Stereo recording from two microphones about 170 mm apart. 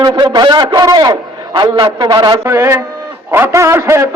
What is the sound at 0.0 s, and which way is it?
A man's voice, 25° right (ahead or behind).